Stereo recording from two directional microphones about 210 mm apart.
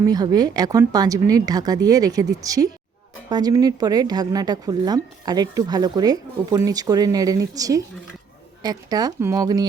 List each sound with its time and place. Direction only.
0.0 s a woman's voice: 20° right (ahead or behind)